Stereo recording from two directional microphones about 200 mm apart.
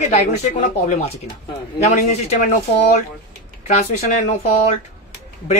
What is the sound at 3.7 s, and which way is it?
Speech, 35° left (ahead or behind).